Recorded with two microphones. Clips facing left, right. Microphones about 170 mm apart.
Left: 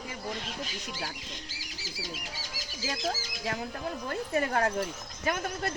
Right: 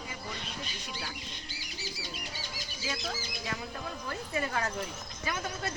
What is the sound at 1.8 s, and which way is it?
Bird flight, 90° left.